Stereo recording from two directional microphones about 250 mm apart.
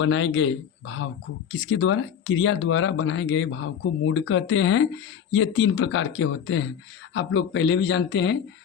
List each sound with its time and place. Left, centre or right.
0.0 s speech: left